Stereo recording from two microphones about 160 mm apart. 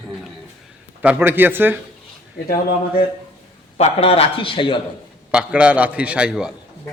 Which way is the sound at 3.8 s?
40° left (ahead or behind).